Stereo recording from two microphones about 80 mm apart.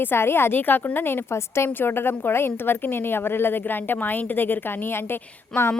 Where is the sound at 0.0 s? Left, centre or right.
Left.